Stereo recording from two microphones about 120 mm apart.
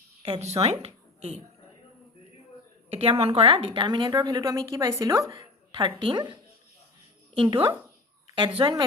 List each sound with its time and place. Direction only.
0.3 s speech: 65° right (ahead or behind)
2.9 s a woman's voice: 55° right (ahead or behind); by 5.2 s 30° right (ahead or behind)
5.3 s a woman's voice: 40° right (ahead or behind)
7.3 s speech: 45° right (ahead or behind)